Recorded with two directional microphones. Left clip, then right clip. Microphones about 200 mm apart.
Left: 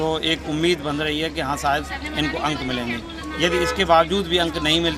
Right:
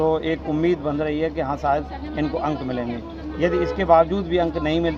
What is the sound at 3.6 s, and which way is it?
Speech, 15° left (ahead or behind).